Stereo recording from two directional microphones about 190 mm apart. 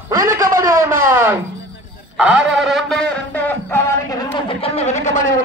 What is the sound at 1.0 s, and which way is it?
Music, 10° right (ahead or behind).